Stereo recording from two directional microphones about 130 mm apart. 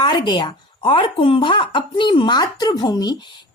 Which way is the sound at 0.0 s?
35° left (ahead or behind).